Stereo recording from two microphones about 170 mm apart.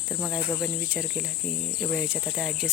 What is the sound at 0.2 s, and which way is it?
Cricket, centre (ahead or behind).